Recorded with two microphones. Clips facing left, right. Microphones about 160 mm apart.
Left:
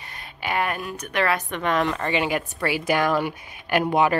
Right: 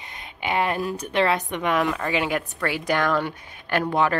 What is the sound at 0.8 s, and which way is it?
Speech, 30° right (ahead or behind).